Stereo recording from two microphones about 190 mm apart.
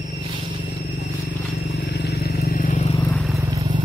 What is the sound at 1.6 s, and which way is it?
Vehicle, 60° left (ahead or behind).